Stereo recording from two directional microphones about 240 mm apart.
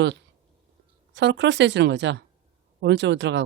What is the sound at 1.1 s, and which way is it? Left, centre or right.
A woman's voice, right.